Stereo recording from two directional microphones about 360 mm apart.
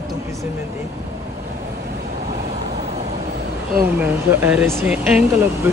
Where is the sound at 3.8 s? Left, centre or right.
Centre.